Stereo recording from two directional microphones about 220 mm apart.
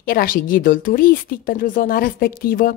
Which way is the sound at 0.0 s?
40° left (ahead or behind).